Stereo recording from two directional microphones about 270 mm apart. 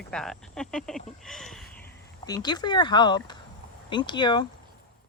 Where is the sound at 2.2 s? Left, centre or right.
Centre.